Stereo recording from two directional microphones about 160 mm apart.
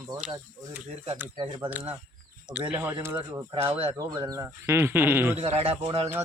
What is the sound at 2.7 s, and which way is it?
Speech, 15° right (ahead or behind).